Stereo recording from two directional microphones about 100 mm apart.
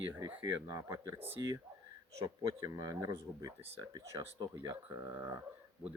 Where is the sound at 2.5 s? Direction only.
35° right (ahead or behind).